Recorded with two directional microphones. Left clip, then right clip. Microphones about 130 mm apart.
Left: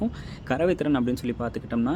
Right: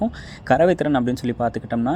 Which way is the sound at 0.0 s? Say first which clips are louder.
Right 6 dB; 40° right (ahead or behind).